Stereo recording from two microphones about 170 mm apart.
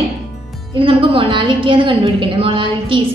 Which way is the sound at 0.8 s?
30° right (ahead or behind).